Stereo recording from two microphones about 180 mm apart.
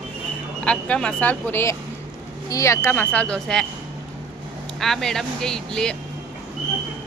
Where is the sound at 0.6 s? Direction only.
5° left (ahead or behind).